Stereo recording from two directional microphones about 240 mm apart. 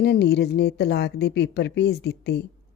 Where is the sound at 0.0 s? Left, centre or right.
Left.